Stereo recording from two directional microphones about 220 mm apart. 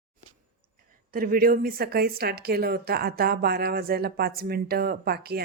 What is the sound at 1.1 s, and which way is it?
Speech, 40° right (ahead or behind).